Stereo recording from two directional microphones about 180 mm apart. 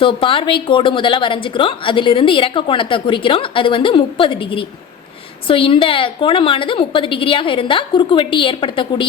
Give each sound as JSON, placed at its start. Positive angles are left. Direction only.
{"t": 0.0, "sound": "a woman's voice", "side_deg": 30}